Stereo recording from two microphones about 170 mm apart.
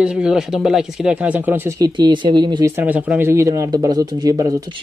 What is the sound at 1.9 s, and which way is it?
Speech, 25° right (ahead or behind).